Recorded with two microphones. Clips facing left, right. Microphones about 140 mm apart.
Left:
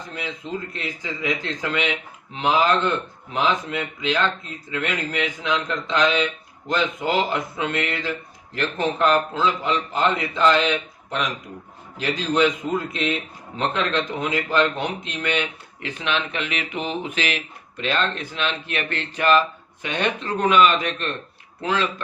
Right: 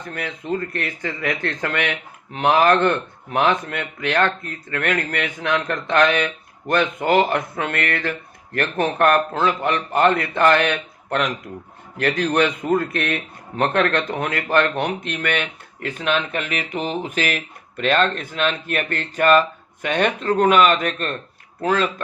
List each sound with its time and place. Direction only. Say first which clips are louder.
0.7 s a man's voice: right 4 dB; 60° right (ahead or behind)
11.9 s a man's voice: right 2 dB; 65° right (ahead or behind)